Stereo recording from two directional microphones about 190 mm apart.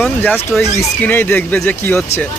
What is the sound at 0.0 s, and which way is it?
Speech, 5° left (ahead or behind).